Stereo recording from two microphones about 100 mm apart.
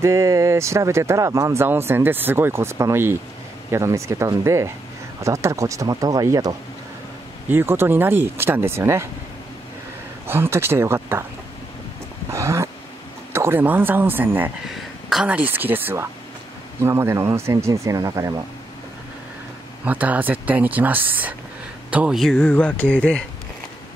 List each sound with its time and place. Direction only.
0.0 s speech: 30° right (ahead or behind)
7.4 s speech: 25° right (ahead or behind)
10.2 s speech: 25° right (ahead or behind)
12.3 s a sound: 30° right (ahead or behind)
13.3 s speech: 25° right (ahead or behind)
14.7 s a sound: centre (ahead or behind)
15.2 s speech: 15° right (ahead or behind); by 18.3 s 35° right (ahead or behind)
19.8 s speech: 15° right (ahead or behind)
22.1 s speech: 5° left (ahead or behind)